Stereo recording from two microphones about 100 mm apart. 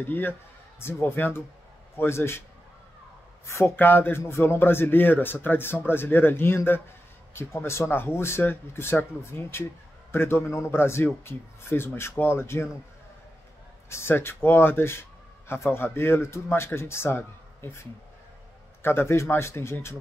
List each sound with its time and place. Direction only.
0.0 s speech: 20° left (ahead or behind)
3.4 s speech: 25° left (ahead or behind)
13.8 s speech: 25° left (ahead or behind)